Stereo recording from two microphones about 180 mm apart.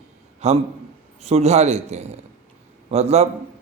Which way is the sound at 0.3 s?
35° right (ahead or behind).